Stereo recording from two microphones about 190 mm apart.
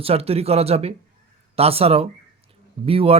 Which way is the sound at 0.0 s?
30° right (ahead or behind).